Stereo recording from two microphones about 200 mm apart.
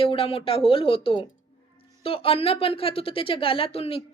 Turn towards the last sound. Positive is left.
turn(degrees=30)  # may be behind; listen again after turning